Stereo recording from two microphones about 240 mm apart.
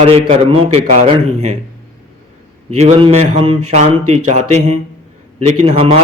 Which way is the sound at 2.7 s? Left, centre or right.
Right.